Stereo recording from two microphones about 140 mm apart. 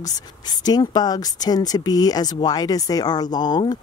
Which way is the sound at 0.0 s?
30° left (ahead or behind).